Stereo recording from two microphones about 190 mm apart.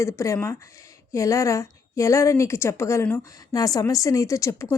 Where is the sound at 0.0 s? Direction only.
15° left (ahead or behind).